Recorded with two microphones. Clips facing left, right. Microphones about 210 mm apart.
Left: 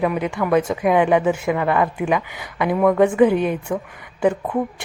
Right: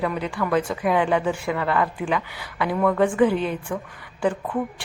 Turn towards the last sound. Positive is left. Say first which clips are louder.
# left 4 dB
turn(degrees=20)  # may be behind; listen again after turning